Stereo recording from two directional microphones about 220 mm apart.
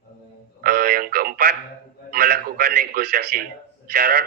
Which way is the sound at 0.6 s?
45° right (ahead or behind).